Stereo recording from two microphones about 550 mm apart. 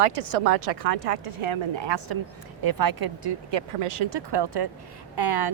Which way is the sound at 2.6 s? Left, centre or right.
Right.